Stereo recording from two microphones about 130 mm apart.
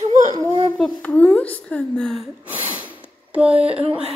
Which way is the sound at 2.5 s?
15° right (ahead or behind).